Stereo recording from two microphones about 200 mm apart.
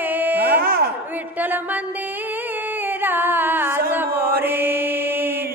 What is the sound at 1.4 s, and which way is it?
Music, 10° right (ahead or behind).